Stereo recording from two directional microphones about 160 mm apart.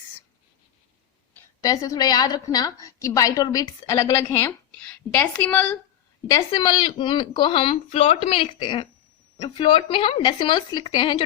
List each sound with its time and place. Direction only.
1.6 s a woman's voice: 20° left (ahead or behind)
6.3 s speech: 25° left (ahead or behind)